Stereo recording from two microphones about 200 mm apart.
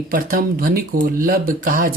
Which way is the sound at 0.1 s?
45° right (ahead or behind).